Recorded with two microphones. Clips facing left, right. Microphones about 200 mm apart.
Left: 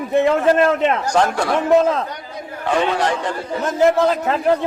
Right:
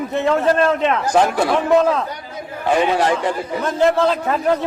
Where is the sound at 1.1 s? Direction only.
5° right (ahead or behind).